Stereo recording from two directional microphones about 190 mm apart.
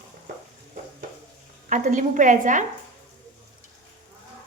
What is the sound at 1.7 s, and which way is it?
Speech, 40° right (ahead or behind).